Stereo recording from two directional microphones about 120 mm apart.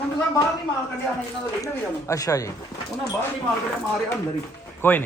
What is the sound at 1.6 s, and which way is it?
Speech, 30° left (ahead or behind).